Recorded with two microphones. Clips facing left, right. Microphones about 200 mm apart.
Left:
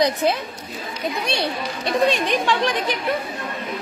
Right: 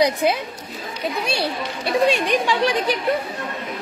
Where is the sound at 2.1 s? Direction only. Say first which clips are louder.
Right 1 dB; 10° right (ahead or behind).